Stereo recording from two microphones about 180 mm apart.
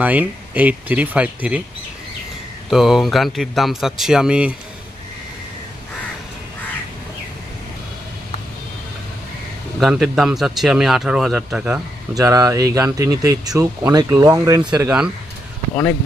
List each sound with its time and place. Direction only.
0.0 s speech: 10° right (ahead or behind)
2.6 s speech: centre (ahead or behind)
9.8 s speech: 5° right (ahead or behind)
12.1 s speech: 20° right (ahead or behind)
14.7 s speech: 10° right (ahead or behind)